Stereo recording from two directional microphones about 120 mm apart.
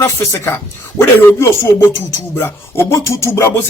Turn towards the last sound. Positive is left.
turn(degrees=20)  # may be behind; listen again after turning